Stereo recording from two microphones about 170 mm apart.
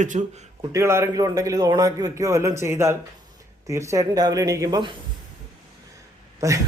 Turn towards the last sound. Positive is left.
turn(degrees=-20)  # may be behind; listen again after turning